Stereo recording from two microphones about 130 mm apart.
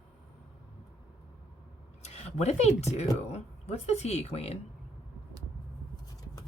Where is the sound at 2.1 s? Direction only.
55° left (ahead or behind).